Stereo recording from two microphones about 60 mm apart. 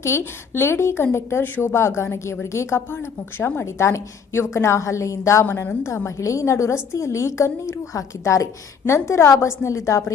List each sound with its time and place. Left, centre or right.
0.0 s a woman's voice: left
8.9 s a woman's voice: left